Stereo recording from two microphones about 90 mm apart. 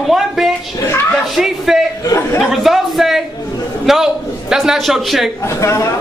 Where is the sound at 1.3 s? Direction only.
Centre (ahead or behind).